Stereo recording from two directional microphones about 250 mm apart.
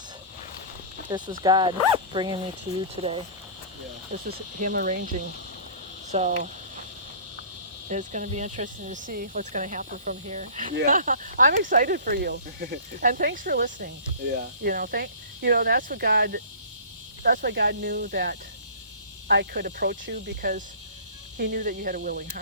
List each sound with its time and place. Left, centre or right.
1.1 s speech: centre
4.3 s speech: right
6.1 s speech: right
7.9 s speech: right